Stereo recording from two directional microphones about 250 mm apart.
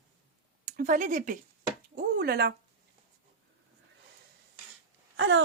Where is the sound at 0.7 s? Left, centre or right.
Right.